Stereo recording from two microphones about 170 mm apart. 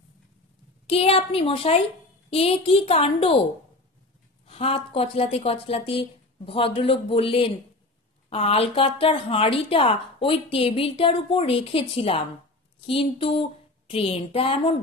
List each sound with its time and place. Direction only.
0.8 s a woman's voice: 35° left (ahead or behind)
4.5 s a woman's voice: 35° left (ahead or behind)